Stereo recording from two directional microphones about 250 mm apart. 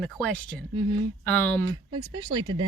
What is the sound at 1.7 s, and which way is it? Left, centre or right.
Speech, centre.